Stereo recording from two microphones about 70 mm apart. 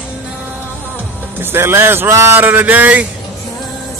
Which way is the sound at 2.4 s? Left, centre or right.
Right.